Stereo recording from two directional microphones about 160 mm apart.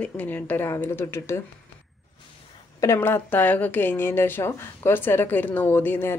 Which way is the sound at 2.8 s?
15° left (ahead or behind).